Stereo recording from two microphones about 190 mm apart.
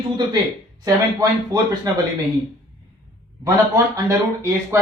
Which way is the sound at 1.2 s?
20° right (ahead or behind).